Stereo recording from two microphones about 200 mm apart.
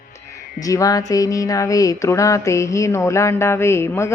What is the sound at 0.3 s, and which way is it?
Speech, 15° left (ahead or behind).